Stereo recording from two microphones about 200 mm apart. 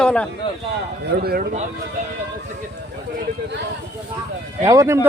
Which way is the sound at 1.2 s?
45° right (ahead or behind).